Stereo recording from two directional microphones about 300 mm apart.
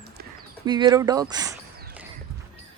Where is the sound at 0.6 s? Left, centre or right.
Centre.